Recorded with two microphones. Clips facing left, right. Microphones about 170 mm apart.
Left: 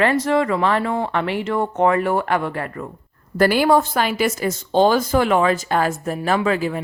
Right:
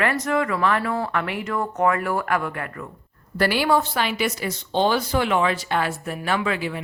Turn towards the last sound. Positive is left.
turn(degrees=40)  # may be behind; listen again after turning